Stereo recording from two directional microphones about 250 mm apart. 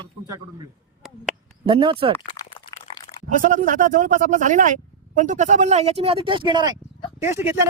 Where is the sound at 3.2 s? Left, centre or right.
Right.